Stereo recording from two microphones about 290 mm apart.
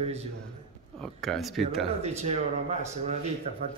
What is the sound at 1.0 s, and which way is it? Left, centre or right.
Speech, centre.